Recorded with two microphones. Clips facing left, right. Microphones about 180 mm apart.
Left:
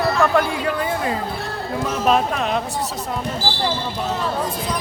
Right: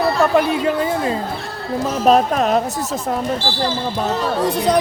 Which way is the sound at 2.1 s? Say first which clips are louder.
Right 6 dB; 40° right (ahead or behind).